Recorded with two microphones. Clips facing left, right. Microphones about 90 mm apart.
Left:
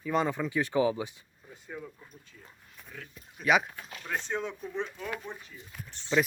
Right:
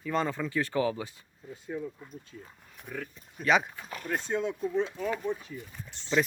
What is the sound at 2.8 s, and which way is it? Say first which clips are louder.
Speech: right 8 dB; 65° right (ahead or behind).